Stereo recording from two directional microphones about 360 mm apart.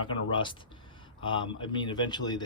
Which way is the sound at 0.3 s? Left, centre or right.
Centre.